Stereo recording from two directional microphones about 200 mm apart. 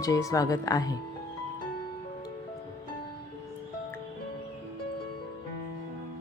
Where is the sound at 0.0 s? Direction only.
15° left (ahead or behind).